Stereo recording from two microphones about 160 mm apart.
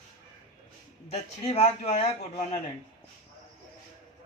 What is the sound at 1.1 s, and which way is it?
Speech, 40° left (ahead or behind).